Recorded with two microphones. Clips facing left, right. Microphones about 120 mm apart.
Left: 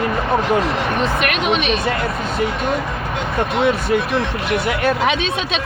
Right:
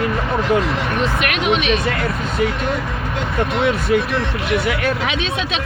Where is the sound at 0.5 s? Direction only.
35° left (ahead or behind).